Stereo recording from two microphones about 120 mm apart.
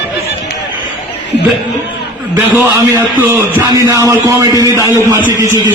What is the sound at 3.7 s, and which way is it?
A man's voice, 25° right (ahead or behind).